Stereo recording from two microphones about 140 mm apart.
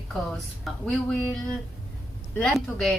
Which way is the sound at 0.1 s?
Centre (ahead or behind).